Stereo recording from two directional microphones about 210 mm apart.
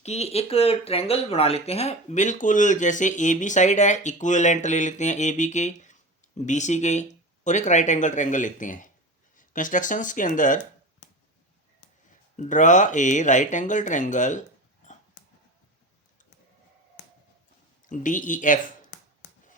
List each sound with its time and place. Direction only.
0.0 s speech: 30° left (ahead or behind)
12.4 s speech: 35° left (ahead or behind)
17.8 s speech: 40° left (ahead or behind)